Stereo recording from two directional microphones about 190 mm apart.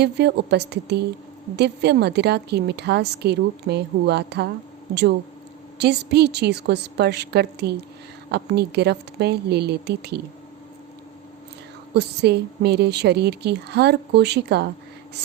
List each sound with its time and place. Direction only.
0.0 s a woman's voice: 60° right (ahead or behind)
5.8 s a woman's voice: 60° right (ahead or behind)
11.9 s a woman's voice: 60° right (ahead or behind)